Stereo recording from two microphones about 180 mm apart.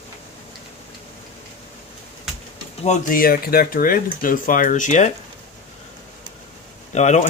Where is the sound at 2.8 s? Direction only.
45° left (ahead or behind).